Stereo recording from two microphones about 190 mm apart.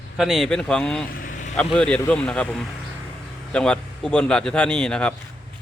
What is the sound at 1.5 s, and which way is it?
Speech, 5° left (ahead or behind).